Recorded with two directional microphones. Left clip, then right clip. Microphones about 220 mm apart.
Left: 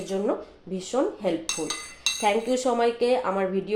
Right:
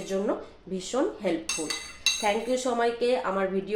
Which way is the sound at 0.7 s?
20° left (ahead or behind).